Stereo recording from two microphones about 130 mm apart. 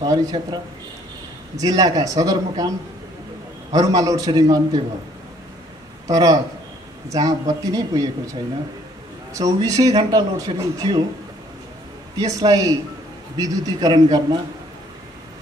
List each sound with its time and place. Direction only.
0.0 s speech: 30° right (ahead or behind)
1.6 s speech: 30° right (ahead or behind)
3.7 s speech: 25° right (ahead or behind)
6.0 s speech: 30° right (ahead or behind)
12.2 s speech: 30° right (ahead or behind)